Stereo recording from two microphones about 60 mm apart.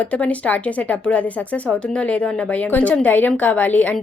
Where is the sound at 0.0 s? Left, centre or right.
Left.